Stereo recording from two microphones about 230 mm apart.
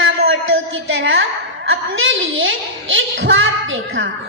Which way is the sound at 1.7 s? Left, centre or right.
Right.